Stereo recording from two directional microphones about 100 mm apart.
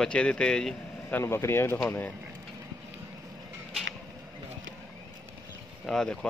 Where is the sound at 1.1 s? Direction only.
25° left (ahead or behind).